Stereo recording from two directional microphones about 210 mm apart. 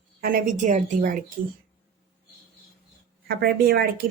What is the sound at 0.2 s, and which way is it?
Speech, 40° right (ahead or behind).